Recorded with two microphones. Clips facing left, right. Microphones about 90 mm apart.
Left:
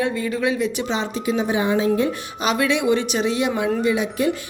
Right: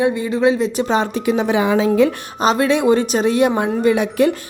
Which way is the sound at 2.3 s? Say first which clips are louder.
Right 5 dB; 35° right (ahead or behind).